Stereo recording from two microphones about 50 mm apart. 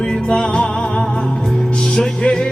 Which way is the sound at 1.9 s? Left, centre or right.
Centre.